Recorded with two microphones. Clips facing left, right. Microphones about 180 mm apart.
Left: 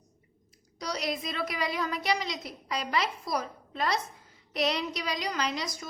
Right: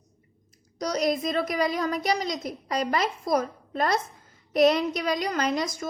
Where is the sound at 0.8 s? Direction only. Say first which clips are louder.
Right 8 dB; 45° right (ahead or behind).